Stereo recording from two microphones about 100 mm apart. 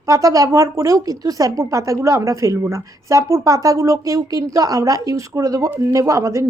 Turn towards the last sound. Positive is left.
turn(degrees=-30)  # may be behind; listen again after turning